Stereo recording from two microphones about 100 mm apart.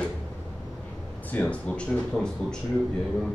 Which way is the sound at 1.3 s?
15° left (ahead or behind).